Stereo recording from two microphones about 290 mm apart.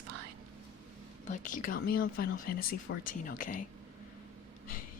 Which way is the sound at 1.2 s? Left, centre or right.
Left.